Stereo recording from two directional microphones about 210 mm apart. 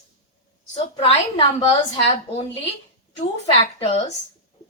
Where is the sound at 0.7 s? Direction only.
30° left (ahead or behind).